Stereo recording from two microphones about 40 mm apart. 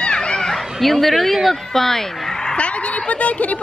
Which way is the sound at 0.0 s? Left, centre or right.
Left.